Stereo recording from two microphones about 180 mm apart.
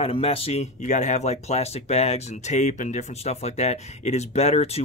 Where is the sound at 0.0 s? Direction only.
30° left (ahead or behind).